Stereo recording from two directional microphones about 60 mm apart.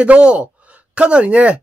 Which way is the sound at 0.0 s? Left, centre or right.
Centre.